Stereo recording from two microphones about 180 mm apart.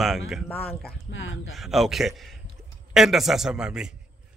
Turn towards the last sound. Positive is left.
turn(degrees=-5)  # may be behind; listen again after turning